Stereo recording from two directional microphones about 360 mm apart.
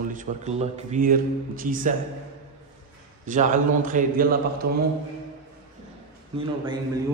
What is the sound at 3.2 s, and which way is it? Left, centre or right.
A man's voice, right.